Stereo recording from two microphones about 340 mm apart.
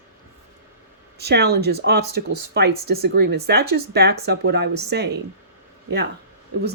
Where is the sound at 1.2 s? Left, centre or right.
Right.